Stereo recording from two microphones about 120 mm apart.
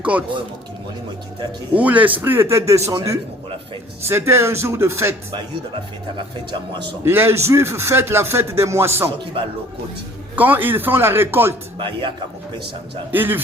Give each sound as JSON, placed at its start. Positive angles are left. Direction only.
{"t": 0.0, "sound": "speech", "side_deg": -10}
{"t": 1.7, "sound": "a man's voice", "side_deg": -10}
{"t": 7.0, "sound": "a man's voice", "side_deg": -20}
{"t": 9.4, "sound": "a man's voice", "side_deg": -50}
{"t": 10.3, "sound": "speech", "side_deg": -15}
{"t": 11.8, "sound": "a man's voice", "side_deg": -45}
{"t": 13.1, "sound": "speech", "side_deg": -15}